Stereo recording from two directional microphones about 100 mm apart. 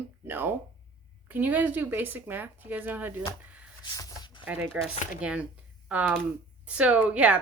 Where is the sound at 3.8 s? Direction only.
40° left (ahead or behind).